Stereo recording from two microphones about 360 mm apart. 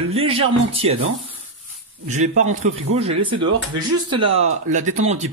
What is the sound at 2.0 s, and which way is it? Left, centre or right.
Speech, centre.